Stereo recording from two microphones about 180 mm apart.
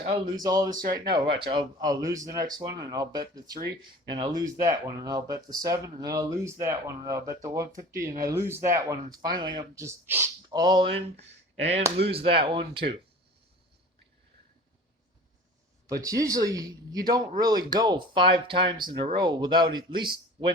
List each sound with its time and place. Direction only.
0.0 s speech: 30° right (ahead or behind)
7.9 s speech: 50° right (ahead or behind)
8.2 s speech: 15° right (ahead or behind)
12.0 s speech: 30° right (ahead or behind)
15.9 s speech: 20° right (ahead or behind)